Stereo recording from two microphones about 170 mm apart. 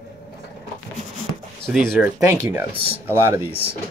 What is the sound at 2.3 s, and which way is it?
Speech, 15° right (ahead or behind).